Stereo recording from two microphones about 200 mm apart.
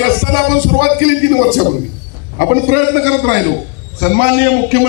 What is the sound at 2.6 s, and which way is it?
Speech, 60° right (ahead or behind).